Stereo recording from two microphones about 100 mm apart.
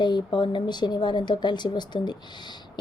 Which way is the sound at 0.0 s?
50° left (ahead or behind).